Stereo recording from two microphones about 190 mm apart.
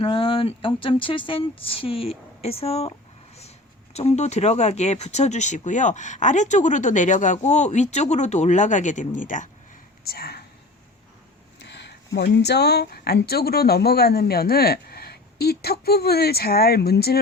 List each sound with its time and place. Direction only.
0.0 s speech: 30° left (ahead or behind)
3.9 s speech: 35° left (ahead or behind)
10.0 s speech: 55° left (ahead or behind)
11.6 s speech: 65° left (ahead or behind)